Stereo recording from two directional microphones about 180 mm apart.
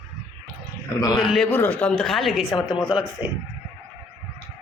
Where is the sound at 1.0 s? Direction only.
20° left (ahead or behind).